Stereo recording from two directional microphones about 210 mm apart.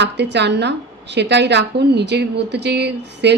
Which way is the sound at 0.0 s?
55° right (ahead or behind).